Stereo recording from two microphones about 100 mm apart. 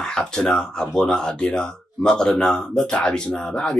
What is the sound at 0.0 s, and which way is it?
A man's voice, 5° left (ahead or behind).